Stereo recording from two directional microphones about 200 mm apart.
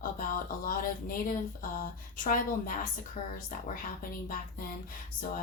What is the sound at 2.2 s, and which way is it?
Speech, 40° left (ahead or behind).